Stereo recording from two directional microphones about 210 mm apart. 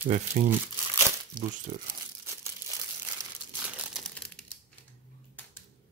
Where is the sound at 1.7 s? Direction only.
45° right (ahead or behind).